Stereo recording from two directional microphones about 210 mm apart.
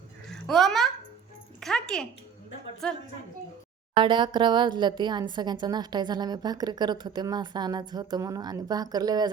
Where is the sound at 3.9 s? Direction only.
20° right (ahead or behind).